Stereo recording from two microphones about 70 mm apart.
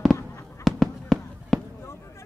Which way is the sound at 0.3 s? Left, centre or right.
Left.